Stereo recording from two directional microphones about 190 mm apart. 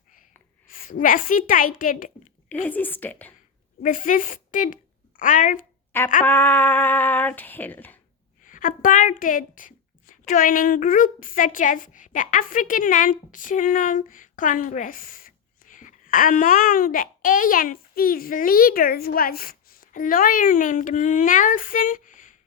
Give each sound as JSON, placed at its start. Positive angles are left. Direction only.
{"t": 0.7, "sound": "a woman's voice", "side_deg": 45}
{"t": 2.6, "sound": "female singing", "side_deg": 10}
{"t": 3.8, "sound": "speech", "side_deg": 45}
{"t": 6.2, "sound": "female singing", "side_deg": 10}
{"t": 8.4, "sound": "a woman's voice", "side_deg": 45}